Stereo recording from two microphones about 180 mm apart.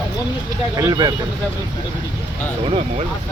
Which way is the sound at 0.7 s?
20° right (ahead or behind).